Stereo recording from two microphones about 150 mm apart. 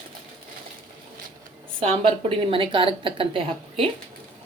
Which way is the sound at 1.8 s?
40° right (ahead or behind).